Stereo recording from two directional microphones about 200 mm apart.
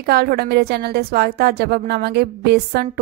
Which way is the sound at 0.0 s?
50° right (ahead or behind).